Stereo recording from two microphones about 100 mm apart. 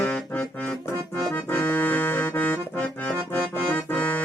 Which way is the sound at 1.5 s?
20° left (ahead or behind).